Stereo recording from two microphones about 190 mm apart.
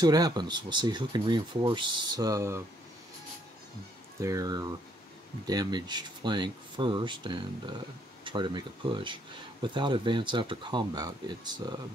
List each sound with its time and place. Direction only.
0.0 s speech: 20° right (ahead or behind)
4.2 s speech: 15° right (ahead or behind)